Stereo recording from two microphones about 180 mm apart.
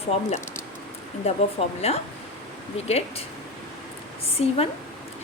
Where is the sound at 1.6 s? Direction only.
30° left (ahead or behind).